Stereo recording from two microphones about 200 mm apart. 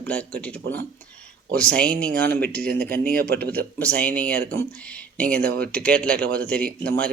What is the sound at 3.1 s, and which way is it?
Speech, 50° right (ahead or behind).